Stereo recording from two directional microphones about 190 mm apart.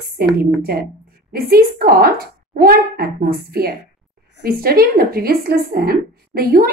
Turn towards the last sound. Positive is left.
turn(degrees=-50)  # may be behind; listen again after turning